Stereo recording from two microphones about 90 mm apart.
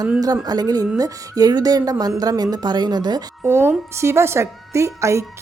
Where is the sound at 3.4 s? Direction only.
30° right (ahead or behind).